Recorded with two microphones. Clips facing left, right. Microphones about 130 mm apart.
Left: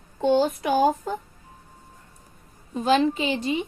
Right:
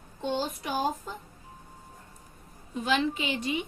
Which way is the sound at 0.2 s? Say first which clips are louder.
Left 10 dB; 60° left (ahead or behind).